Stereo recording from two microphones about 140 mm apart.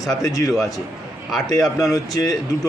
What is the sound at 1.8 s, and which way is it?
Speech, 25° left (ahead or behind).